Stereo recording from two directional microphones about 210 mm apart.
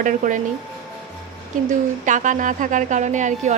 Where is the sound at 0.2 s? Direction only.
40° right (ahead or behind).